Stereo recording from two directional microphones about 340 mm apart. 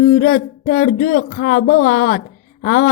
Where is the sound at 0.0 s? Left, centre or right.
Left.